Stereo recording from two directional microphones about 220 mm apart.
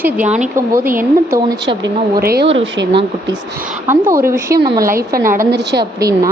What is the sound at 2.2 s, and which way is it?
Speech, 45° right (ahead or behind).